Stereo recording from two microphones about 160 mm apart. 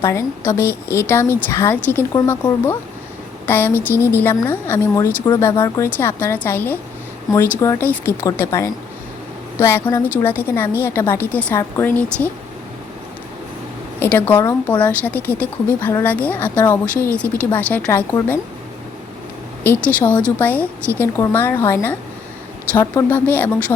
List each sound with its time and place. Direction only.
0.0 s a woman's voice: 20° left (ahead or behind)
14.0 s a woman's voice: 10° left (ahead or behind)
19.6 s a woman's voice: 10° left (ahead or behind)